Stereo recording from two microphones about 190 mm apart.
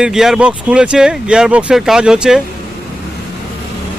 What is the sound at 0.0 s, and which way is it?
A man's voice, 5° right (ahead or behind).